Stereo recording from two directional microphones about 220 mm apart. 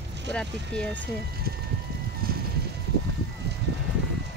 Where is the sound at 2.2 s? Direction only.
40° right (ahead or behind).